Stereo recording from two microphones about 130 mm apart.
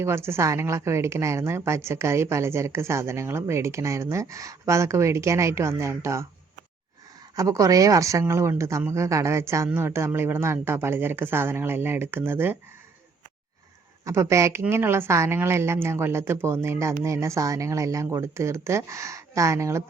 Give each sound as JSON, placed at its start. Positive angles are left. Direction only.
{"t": 0.0, "sound": "a woman's voice", "side_deg": -20}
{"t": 7.3, "sound": "a woman's voice", "side_deg": -25}
{"t": 14.0, "sound": "a woman's voice", "side_deg": -25}